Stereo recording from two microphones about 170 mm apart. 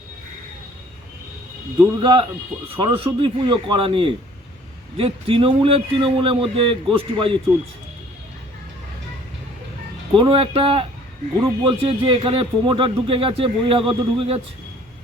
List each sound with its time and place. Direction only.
1.8 s a man's voice: 25° right (ahead or behind)
10.1 s a man's voice: 30° right (ahead or behind)